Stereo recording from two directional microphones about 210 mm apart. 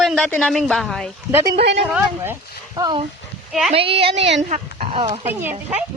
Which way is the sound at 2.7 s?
20° right (ahead or behind).